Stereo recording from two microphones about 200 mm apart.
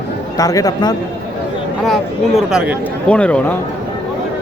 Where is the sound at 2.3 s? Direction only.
5° right (ahead or behind).